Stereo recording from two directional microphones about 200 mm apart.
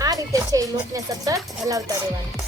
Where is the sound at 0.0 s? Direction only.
15° right (ahead or behind).